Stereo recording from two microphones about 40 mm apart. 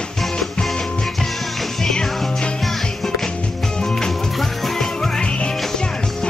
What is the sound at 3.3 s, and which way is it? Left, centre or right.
Music, left.